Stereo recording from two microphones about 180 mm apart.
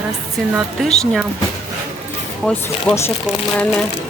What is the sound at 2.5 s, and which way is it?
Speech, 10° left (ahead or behind).